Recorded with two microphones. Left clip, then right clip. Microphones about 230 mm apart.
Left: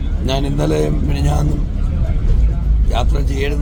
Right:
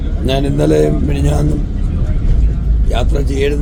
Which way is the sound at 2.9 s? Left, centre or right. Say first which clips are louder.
Right 3 dB; centre.